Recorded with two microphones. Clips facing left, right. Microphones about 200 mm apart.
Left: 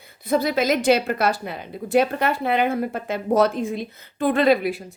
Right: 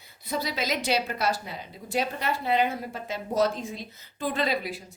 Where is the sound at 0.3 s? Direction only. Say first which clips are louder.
Left 10 dB; 55° left (ahead or behind).